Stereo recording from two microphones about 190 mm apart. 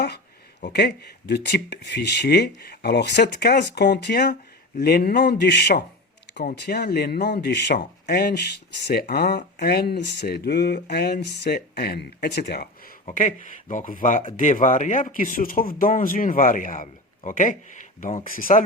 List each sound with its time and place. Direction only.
0.6 s speech: 60° left (ahead or behind)
6.4 s speech: 50° left (ahead or behind)
13.1 s speech: 40° left (ahead or behind)